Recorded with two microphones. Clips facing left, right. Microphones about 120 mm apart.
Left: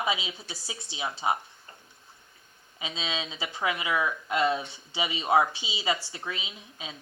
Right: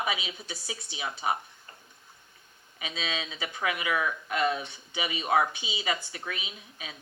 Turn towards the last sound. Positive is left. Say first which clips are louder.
# left 1 dB
turn(degrees=25)  # may be behind; listen again after turning